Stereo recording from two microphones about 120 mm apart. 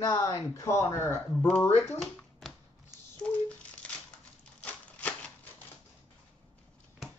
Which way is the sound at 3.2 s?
10° left (ahead or behind).